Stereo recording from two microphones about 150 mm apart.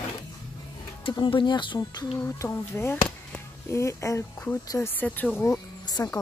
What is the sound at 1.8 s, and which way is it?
Speech, 20° left (ahead or behind).